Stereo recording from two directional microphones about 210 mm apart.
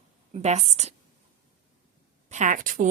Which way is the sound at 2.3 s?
35° right (ahead or behind).